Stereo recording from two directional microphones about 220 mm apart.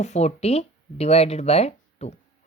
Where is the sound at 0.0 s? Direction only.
30° left (ahead or behind).